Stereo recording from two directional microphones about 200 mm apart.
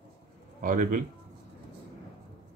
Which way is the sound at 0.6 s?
40° right (ahead or behind).